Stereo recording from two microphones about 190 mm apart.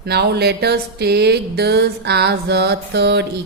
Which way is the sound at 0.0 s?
60° right (ahead or behind).